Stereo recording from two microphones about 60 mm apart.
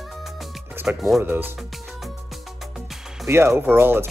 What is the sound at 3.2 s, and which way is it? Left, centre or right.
Speech, right.